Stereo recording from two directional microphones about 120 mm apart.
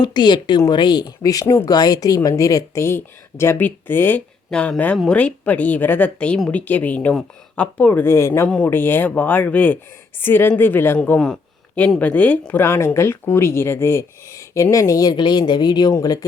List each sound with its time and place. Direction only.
0.0 s a woman's voice: 40° left (ahead or behind)